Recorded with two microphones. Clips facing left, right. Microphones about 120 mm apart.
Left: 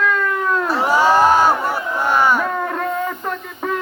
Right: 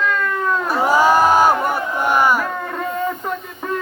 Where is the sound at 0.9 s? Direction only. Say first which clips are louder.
Even; 15° right (ahead or behind).